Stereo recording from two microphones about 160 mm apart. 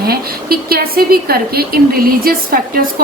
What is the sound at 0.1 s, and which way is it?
A woman's voice, 70° right (ahead or behind).